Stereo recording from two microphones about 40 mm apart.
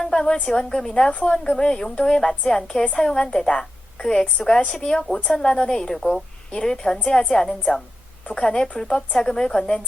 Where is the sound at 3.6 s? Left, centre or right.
Centre.